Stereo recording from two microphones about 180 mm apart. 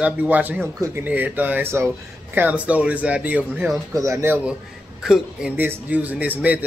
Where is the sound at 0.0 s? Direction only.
10° right (ahead or behind).